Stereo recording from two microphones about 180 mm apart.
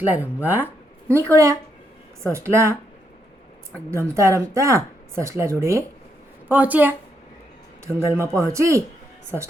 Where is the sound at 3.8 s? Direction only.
15° right (ahead or behind).